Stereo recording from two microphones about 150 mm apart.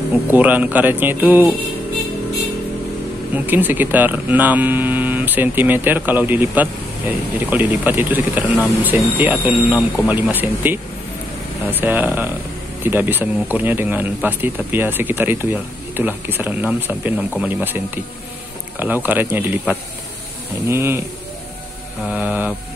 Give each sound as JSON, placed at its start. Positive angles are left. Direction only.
{"t": 0.3, "sound": "speech", "side_deg": -10}
{"t": 3.3, "sound": "speech", "side_deg": -10}
{"t": 22.0, "sound": "speech", "side_deg": -10}